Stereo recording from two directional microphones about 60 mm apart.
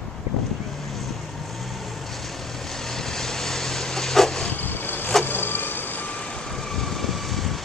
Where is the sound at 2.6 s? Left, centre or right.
Centre.